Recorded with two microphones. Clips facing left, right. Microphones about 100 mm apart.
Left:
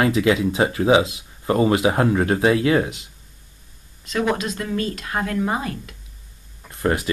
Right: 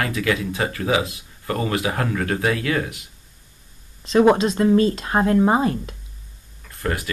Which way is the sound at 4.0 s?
30° right (ahead or behind).